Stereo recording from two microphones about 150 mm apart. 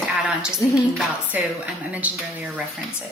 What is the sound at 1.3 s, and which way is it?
Speech, 10° right (ahead or behind).